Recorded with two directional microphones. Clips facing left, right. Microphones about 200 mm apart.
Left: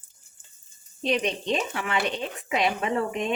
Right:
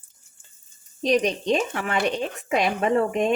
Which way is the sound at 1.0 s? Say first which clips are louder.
Right 5 dB; 40° right (ahead or behind).